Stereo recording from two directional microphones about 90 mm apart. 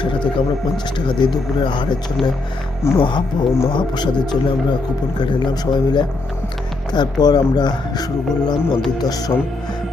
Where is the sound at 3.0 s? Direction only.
60° left (ahead or behind).